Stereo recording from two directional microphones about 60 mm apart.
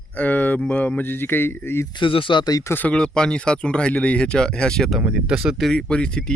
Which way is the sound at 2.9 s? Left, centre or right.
Centre.